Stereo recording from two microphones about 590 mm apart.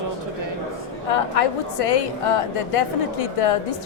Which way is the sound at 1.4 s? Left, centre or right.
Left.